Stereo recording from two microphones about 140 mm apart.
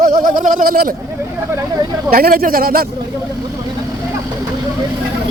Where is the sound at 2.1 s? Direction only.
90° right.